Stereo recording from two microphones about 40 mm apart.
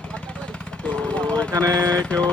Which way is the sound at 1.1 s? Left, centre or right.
Left.